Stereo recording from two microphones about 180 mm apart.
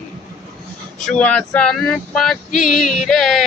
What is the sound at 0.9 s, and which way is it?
Female singing, 5° left (ahead or behind).